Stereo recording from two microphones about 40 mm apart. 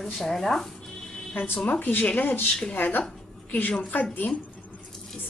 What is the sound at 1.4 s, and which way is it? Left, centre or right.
Speech, left.